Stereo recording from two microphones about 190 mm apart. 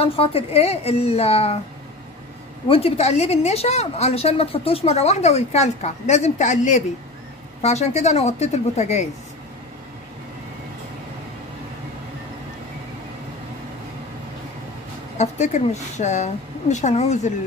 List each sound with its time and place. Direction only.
0.0 s a woman's voice: 30° left (ahead or behind)
2.7 s a woman's voice: 30° left (ahead or behind)
15.1 s a woman's voice: 40° left (ahead or behind)